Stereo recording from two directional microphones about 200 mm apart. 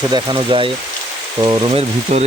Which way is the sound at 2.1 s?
35° right (ahead or behind).